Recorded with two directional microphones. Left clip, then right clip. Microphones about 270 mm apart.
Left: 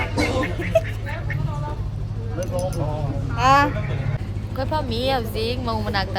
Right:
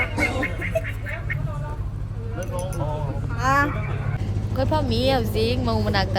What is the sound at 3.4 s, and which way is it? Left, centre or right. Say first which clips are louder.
Vehicle: left 5 dB; centre.